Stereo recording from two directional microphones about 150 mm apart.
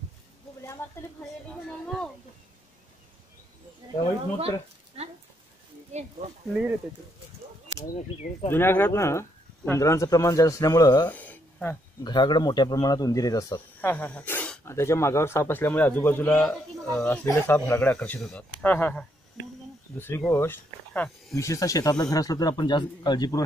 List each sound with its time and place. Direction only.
0.8 s a woman's voice: 15° left (ahead or behind)
1.7 s speech: 5° left (ahead or behind)
5.0 s speech: 45° right (ahead or behind)
7.8 s speech: 50° left (ahead or behind)
8.5 s speech: 15° left (ahead or behind)
11.1 s a sound: 10° left (ahead or behind)
12.0 s speech: 30° left (ahead or behind)
13.7 s speech: 10° left (ahead or behind)
17.3 s speech: 20° left (ahead or behind)
21.4 s speech: 20° left (ahead or behind)